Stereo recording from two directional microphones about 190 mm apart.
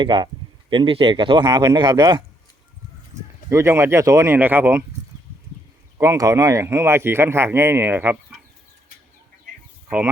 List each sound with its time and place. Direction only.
0.0 s speech: 25° right (ahead or behind)
3.1 s a sound: 40° right (ahead or behind)
3.5 s speech: 15° right (ahead or behind)
6.0 s speech: 15° right (ahead or behind)